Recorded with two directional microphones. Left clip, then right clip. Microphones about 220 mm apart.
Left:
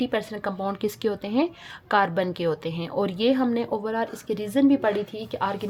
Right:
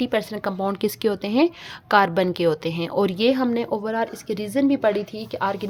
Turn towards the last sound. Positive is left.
turn(degrees=-25)  # may be behind; listen again after turning